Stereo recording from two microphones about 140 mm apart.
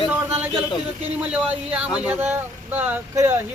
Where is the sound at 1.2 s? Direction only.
10° right (ahead or behind).